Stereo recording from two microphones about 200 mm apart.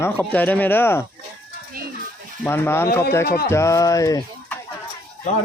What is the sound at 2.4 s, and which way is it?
Speech, 10° left (ahead or behind).